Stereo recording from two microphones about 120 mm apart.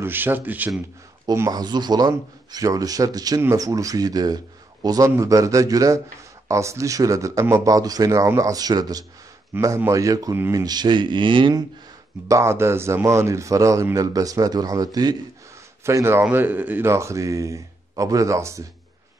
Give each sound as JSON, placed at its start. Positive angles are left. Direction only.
{"t": 0.0, "sound": "speech", "side_deg": -15}
{"t": 1.3, "sound": "a man's voice", "side_deg": -30}
{"t": 12.3, "sound": "a man's voice", "side_deg": -25}